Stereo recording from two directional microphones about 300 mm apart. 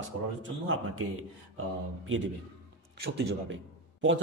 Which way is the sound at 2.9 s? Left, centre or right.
Right.